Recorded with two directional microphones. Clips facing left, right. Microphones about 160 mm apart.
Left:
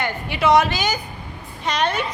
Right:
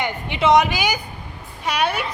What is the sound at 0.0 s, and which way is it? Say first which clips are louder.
A woman's voice: even; 20° right (ahead or behind).